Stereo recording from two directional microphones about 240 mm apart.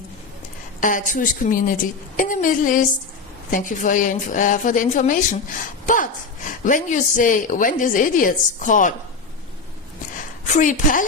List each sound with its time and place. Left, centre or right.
0.8 s a woman's voice: left
10.5 s a woman's voice: left